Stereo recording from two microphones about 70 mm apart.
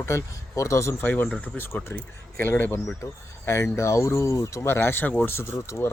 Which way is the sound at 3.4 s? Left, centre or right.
Left.